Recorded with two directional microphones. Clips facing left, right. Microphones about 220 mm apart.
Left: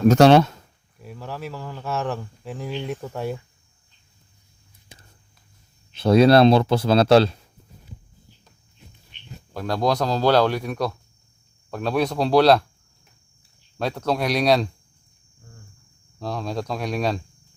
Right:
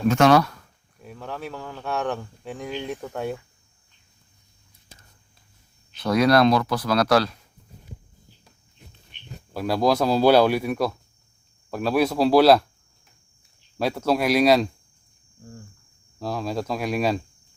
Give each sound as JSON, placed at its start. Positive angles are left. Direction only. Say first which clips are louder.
{"t": 0.1, "sound": "speech", "louder": "left 3 dB", "side_deg": 30}
{"t": 1.0, "sound": "speech", "louder": "left 1 dB", "side_deg": 5}
{"t": 5.9, "sound": "speech", "louder": "left 4 dB", "side_deg": 25}
{"t": 9.5, "sound": "speech", "louder": "right 2 dB", "side_deg": -5}
{"t": 13.7, "sound": "speech", "louder": "right 2 dB", "side_deg": -5}
{"t": 16.2, "sound": "speech", "louder": "right 1 dB", "side_deg": -5}